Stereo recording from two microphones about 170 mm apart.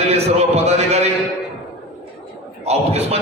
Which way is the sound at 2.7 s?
40° right (ahead or behind).